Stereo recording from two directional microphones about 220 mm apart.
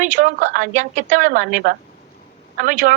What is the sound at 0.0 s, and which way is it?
A woman's voice, 35° right (ahead or behind).